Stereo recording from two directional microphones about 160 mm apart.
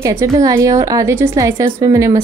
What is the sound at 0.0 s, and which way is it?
A woman's voice, 20° right (ahead or behind).